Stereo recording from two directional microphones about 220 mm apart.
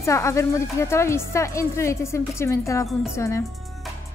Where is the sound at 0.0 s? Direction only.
15° left (ahead or behind).